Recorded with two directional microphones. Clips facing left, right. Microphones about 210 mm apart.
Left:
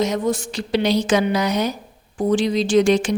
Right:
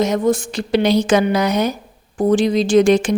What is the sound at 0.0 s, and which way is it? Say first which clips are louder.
A woman's voice: right 4 dB; 50° right (ahead or behind).